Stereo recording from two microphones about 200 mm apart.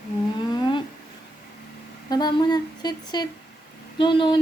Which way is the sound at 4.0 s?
25° left (ahead or behind).